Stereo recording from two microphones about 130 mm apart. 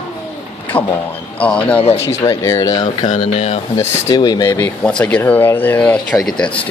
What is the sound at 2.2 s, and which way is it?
Speech, 25° left (ahead or behind).